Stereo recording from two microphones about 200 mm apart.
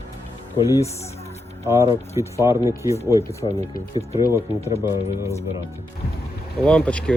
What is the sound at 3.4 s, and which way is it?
Speech, 25° left (ahead or behind).